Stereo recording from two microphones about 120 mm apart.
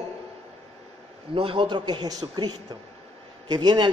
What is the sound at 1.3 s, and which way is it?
A man's voice, 45° right (ahead or behind).